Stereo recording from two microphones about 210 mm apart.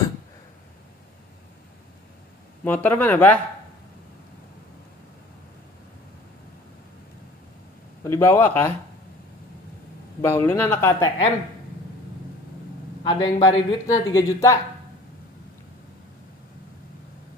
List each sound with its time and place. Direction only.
2.6 s speech: 10° left (ahead or behind)
8.0 s speech: 15° left (ahead or behind)
10.2 s speech: 10° left (ahead or behind)
13.0 s speech: 25° left (ahead or behind)